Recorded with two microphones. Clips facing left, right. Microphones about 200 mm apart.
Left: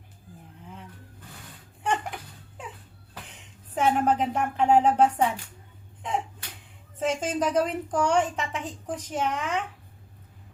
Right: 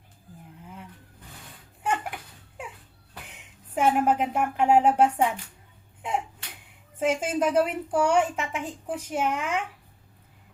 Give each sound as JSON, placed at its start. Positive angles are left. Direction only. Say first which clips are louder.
{"t": 1.8, "sound": "a sound", "louder": "even", "side_deg": -5}
{"t": 3.8, "sound": "a woman's voice", "louder": "right 1 dB", "side_deg": -10}
{"t": 7.0, "sound": "a woman's voice", "louder": "right 2 dB", "side_deg": -10}